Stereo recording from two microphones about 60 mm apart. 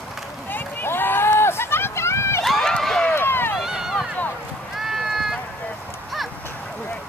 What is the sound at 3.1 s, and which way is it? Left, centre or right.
Run, left.